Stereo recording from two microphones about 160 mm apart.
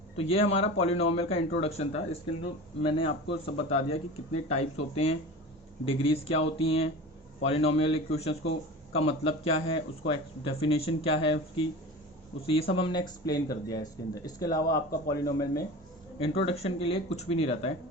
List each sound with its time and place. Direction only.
0.2 s speech: 35° left (ahead or behind); by 15.6 s 20° left (ahead or behind)
16.1 s speech: 35° left (ahead or behind)